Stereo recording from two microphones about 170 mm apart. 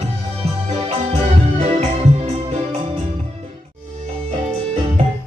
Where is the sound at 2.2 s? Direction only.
40° right (ahead or behind).